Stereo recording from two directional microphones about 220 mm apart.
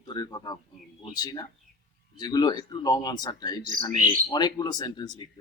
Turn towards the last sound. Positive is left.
turn(degrees=20)  # may be behind; listen again after turning